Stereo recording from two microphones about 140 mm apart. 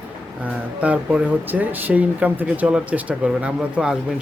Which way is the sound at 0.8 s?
10° right (ahead or behind).